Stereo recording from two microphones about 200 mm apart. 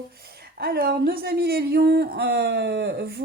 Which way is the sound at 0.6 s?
50° right (ahead or behind).